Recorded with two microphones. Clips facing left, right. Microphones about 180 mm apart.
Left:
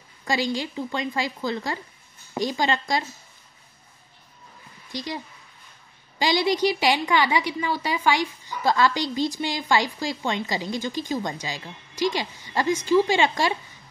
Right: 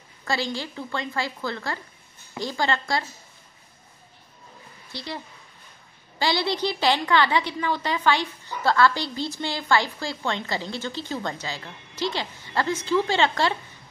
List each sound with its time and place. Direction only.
0.2 s a woman's voice: 15° left (ahead or behind)
4.9 s a woman's voice: 15° left (ahead or behind)